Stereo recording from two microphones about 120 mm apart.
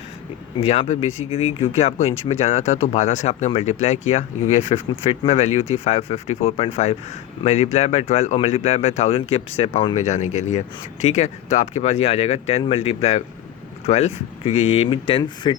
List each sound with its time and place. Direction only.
0.6 s speech: 60° left (ahead or behind); by 10.6 s 80° left
11.0 s speech: 70° left (ahead or behind); by 15.6 s 45° left (ahead or behind)